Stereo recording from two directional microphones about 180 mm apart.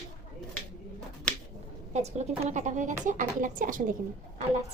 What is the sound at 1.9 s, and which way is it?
Speech, 40° right (ahead or behind).